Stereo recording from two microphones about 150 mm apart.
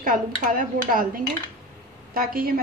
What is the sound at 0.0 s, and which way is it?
Speech, 65° right (ahead or behind).